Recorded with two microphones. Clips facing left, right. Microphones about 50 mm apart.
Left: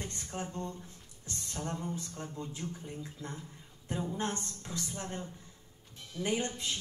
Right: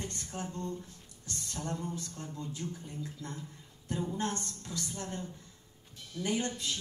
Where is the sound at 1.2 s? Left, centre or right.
Left.